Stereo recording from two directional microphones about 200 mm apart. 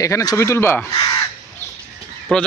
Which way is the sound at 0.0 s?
15° left (ahead or behind).